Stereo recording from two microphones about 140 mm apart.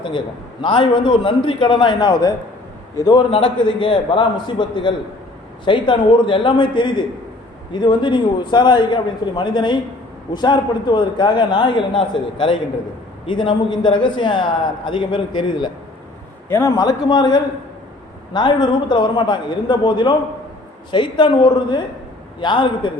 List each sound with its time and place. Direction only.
0.6 s a man's voice: 35° left (ahead or behind)
16.5 s a man's voice: 20° left (ahead or behind)